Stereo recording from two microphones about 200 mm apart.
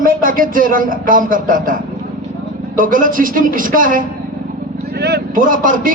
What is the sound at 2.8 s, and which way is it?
A man's voice, 45° right (ahead or behind).